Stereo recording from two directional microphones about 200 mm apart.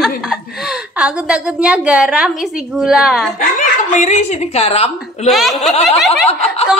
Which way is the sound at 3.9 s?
35° left (ahead or behind).